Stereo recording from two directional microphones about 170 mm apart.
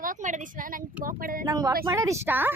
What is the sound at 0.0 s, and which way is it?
A child's voice, 50° right (ahead or behind).